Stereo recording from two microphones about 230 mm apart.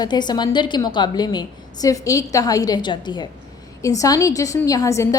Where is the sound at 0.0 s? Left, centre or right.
Centre.